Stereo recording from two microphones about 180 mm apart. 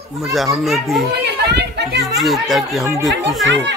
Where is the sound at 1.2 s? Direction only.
70° right (ahead or behind).